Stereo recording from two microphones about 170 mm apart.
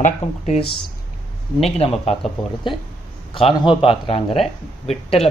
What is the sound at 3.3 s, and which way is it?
Speech, 30° left (ahead or behind).